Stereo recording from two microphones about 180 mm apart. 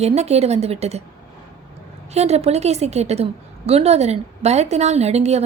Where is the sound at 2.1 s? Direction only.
35° right (ahead or behind).